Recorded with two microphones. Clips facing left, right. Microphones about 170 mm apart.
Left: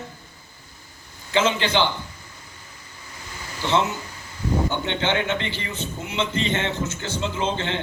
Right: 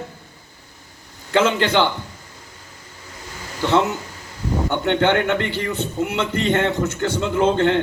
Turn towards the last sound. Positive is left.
turn(degrees=-55)  # may be behind; listen again after turning